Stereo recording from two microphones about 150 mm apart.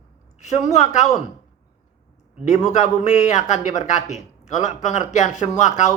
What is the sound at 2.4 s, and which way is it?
Speech, 50° left (ahead or behind).